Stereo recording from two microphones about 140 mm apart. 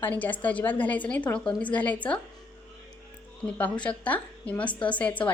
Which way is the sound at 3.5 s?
10° left (ahead or behind).